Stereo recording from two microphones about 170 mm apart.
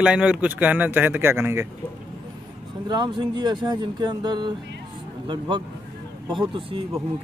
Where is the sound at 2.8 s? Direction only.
25° right (ahead or behind).